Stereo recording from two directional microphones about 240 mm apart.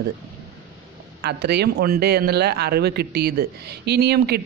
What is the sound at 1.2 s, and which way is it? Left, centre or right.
Speech, right.